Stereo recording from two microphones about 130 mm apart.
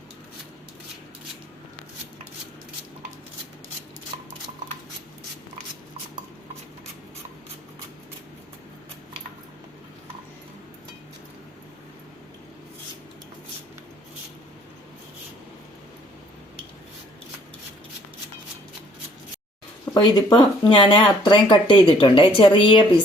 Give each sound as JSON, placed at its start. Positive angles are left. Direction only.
{"t": 20.0, "sound": "speech", "side_deg": 35}